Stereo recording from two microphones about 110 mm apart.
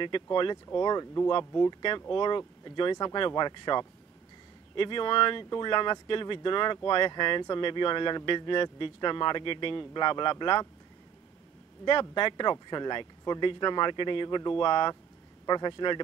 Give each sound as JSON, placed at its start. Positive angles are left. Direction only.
{"t": 0.0, "sound": "speech", "side_deg": 50}
{"t": 11.8, "sound": "speech", "side_deg": 45}